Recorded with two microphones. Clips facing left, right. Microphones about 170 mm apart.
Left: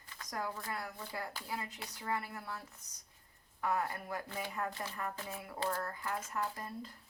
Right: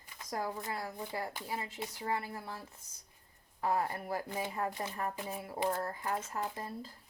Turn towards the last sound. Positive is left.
turn(degrees=-25)  # may be behind; listen again after turning